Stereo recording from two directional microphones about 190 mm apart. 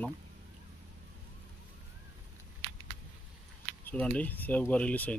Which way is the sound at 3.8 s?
10° left (ahead or behind).